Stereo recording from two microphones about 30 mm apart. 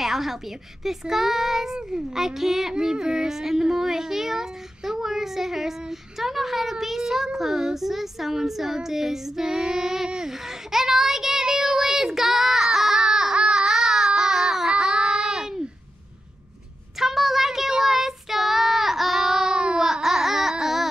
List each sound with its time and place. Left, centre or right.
0.0 s speech: centre
10.3 s child singing: centre
13.4 s baby cry: right
14.8 s a sound: right
16.9 s a sound: centre
17.6 s child singing: centre
19.5 s baby cry: right
19.8 s baby cry: centre